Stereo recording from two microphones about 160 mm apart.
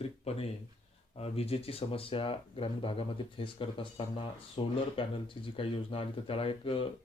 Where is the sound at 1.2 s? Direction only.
40° left (ahead or behind).